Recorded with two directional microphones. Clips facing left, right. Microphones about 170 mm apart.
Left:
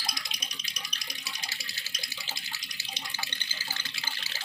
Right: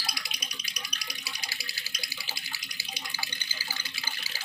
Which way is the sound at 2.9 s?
10° right (ahead or behind).